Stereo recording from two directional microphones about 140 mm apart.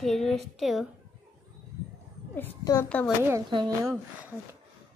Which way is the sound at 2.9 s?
10° left (ahead or behind).